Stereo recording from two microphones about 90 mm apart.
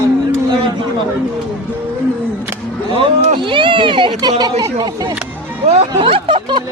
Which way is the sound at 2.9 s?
70° right (ahead or behind).